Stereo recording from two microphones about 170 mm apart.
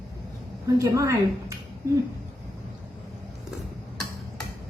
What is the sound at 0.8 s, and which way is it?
Speech, 20° right (ahead or behind).